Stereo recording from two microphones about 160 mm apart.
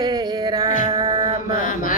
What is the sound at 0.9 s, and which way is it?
Mantra, 20° right (ahead or behind).